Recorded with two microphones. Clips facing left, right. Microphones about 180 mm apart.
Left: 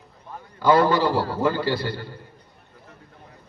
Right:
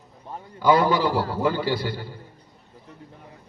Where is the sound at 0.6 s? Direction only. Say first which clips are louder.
Left 1 dB; 15° right (ahead or behind).